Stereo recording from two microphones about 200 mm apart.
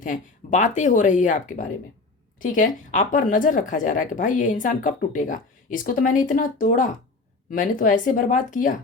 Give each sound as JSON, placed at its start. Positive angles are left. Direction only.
{"t": 0.0, "sound": "speech", "side_deg": 40}